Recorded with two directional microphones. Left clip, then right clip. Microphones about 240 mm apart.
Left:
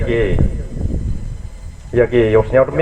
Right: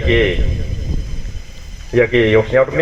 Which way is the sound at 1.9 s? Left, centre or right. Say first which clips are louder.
Even; right.